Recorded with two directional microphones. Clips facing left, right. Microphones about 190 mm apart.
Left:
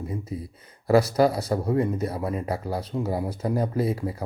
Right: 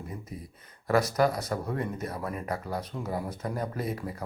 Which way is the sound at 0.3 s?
30° left (ahead or behind).